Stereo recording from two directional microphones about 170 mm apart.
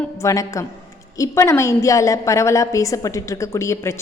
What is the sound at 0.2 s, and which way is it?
A woman's voice, 20° left (ahead or behind).